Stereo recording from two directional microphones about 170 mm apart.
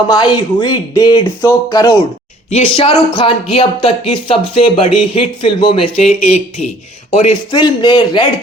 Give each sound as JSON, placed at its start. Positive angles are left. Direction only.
{"t": 0.1, "sound": "speech", "side_deg": 25}
{"t": 2.5, "sound": "speech", "side_deg": 35}
{"t": 7.3, "sound": "speech", "side_deg": 25}